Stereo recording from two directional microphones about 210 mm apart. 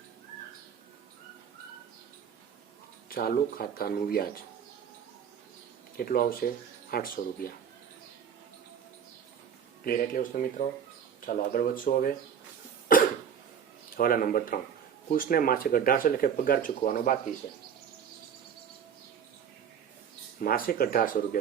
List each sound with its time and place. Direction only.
3.1 s speech: 45° left (ahead or behind)
6.0 s speech: 45° left (ahead or behind)
9.8 s speech: 40° left (ahead or behind)
12.9 s cough: 40° left (ahead or behind)
13.9 s speech: 45° left (ahead or behind)
20.4 s speech: 45° left (ahead or behind)